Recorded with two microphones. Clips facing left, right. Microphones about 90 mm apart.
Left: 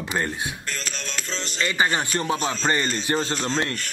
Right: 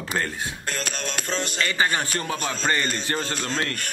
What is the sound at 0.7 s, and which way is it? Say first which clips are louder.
Music: right 3 dB; 55° right (ahead or behind).